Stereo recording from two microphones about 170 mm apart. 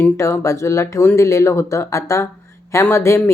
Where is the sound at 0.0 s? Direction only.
15° left (ahead or behind).